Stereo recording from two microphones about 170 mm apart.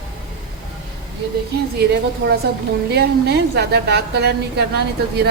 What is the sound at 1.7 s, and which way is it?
A woman's voice, 70° right (ahead or behind).